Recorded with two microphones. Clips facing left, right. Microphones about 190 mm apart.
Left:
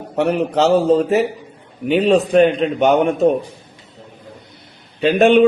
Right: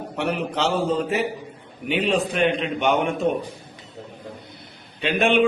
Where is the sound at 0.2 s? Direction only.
40° left (ahead or behind).